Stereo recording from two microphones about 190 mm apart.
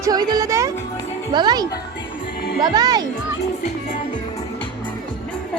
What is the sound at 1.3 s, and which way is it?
Speech, 20° right (ahead or behind).